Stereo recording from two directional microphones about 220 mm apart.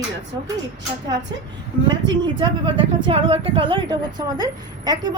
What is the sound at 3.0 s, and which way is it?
A woman's voice, 25° right (ahead or behind).